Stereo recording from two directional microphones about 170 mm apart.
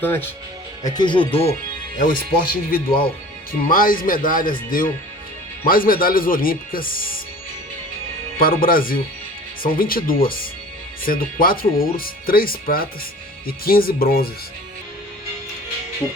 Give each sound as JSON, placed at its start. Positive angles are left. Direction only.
{"t": 0.0, "sound": "speech", "side_deg": 10}
{"t": 0.9, "sound": "speech", "side_deg": 25}
{"t": 2.0, "sound": "speech", "side_deg": 55}
{"t": 8.4, "sound": "speech", "side_deg": 60}